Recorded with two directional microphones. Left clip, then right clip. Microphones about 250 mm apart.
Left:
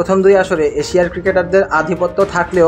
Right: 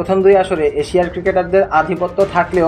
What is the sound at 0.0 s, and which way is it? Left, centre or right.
A man's voice, left.